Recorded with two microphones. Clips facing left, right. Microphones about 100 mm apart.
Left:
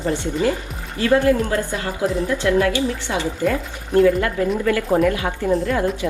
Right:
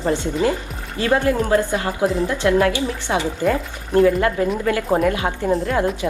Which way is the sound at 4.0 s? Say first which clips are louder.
Even; 30° right (ahead or behind).